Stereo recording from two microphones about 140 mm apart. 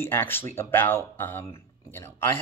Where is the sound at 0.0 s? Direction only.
15° left (ahead or behind).